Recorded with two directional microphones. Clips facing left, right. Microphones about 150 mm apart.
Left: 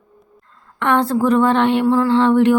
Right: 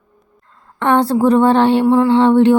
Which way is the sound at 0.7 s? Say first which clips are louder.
Right 3 dB; 35° right (ahead or behind).